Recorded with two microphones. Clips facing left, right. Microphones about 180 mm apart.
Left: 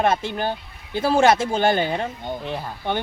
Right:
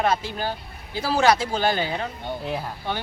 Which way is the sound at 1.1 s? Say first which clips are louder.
Left 2 dB; 25° left (ahead or behind).